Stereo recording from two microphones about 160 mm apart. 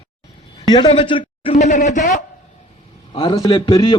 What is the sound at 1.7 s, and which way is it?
Speech, 50° left (ahead or behind).